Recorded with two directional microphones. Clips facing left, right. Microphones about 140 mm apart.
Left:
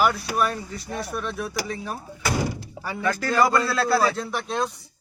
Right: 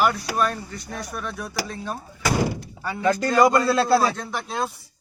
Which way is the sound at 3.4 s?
25° right (ahead or behind).